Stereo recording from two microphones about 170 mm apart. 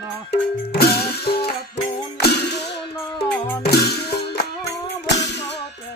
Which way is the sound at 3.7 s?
75° left (ahead or behind).